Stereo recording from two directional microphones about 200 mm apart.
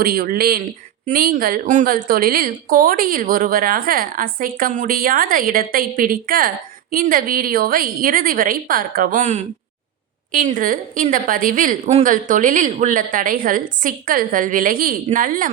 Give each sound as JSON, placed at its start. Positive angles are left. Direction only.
{"t": 0.0, "sound": "a woman's voice", "side_deg": -50}